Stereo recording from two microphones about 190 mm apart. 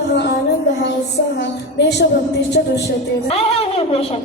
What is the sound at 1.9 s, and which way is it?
Music, 60° left (ahead or behind).